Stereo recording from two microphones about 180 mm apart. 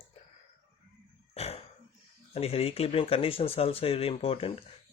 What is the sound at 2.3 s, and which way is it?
Speech, 35° left (ahead or behind).